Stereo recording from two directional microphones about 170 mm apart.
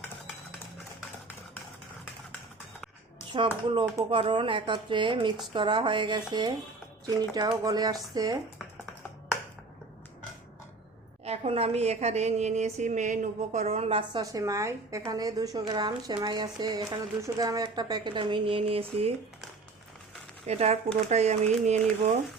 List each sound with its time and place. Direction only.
3.3 s speech: 30° right (ahead or behind)
11.3 s a woman's voice: 35° right (ahead or behind)
14.2 s speech: 20° right (ahead or behind)
20.5 s a woman's voice: 40° right (ahead or behind)